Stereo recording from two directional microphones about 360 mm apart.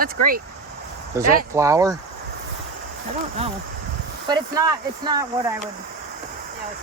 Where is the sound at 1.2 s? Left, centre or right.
Centre.